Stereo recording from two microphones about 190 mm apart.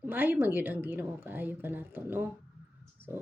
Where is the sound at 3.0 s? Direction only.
10° right (ahead or behind).